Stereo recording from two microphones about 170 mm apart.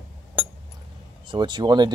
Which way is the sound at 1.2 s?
25° right (ahead or behind).